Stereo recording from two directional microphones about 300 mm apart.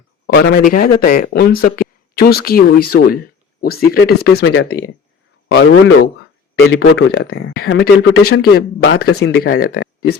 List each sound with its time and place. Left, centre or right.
0.3 s speech: left